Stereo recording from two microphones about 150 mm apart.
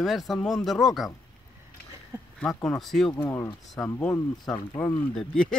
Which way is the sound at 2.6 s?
5° left (ahead or behind).